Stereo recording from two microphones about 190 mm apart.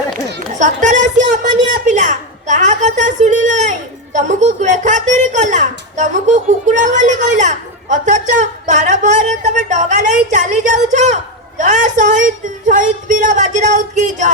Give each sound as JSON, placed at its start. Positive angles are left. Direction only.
{"t": 0.6, "sound": "a woman's voice", "side_deg": -40}